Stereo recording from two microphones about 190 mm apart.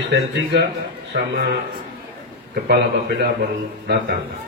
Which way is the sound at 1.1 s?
60° right (ahead or behind).